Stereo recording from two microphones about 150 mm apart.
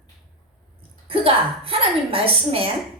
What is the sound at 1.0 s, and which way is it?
A woman's voice, 40° right (ahead or behind).